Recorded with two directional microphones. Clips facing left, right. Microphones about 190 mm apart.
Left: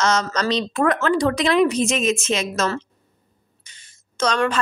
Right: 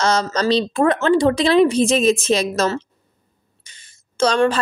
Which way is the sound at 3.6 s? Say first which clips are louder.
Right 4 dB; 30° right (ahead or behind).